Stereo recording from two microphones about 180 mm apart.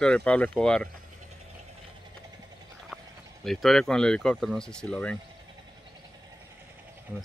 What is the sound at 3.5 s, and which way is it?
Speech, centre (ahead or behind).